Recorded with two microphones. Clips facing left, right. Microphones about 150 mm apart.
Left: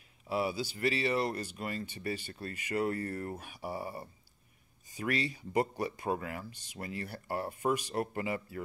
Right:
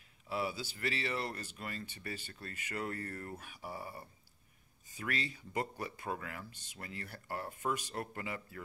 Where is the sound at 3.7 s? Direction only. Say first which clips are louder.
Left 6 dB; 35° left (ahead or behind).